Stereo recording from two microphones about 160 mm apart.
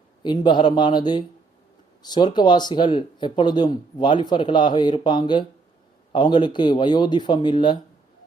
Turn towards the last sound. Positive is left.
turn(degrees=30)  # may be behind; listen again after turning